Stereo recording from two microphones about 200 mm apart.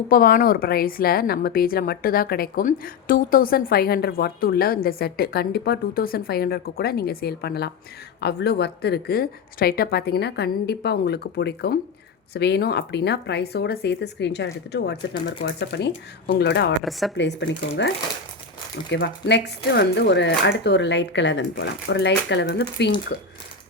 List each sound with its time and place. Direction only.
0.1 s a woman's voice: 45° left (ahead or behind)